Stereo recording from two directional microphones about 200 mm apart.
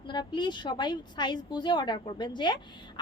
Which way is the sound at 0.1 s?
20° left (ahead or behind).